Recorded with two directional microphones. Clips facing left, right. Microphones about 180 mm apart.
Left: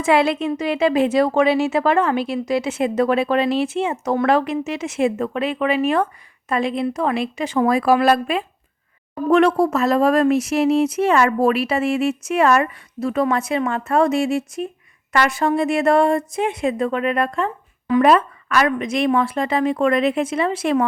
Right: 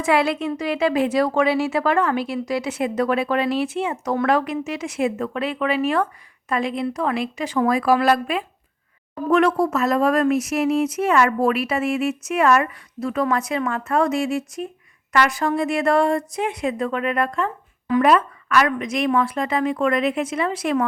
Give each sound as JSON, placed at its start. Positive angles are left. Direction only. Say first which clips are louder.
{"t": 0.0, "sound": "a woman's voice", "louder": "left 3 dB", "side_deg": 25}